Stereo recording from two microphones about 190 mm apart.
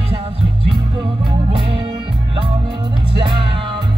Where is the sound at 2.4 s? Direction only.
25° right (ahead or behind).